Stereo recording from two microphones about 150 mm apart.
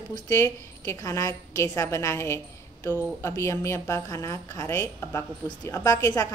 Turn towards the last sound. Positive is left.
turn(degrees=20)  # may be behind; listen again after turning